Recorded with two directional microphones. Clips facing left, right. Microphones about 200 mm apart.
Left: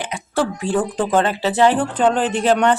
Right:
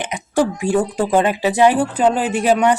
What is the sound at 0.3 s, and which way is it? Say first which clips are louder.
Speech: right 3 dB; 10° right (ahead or behind).